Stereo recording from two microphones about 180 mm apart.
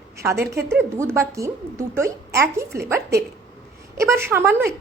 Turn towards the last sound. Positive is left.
turn(degrees=-15)  # may be behind; listen again after turning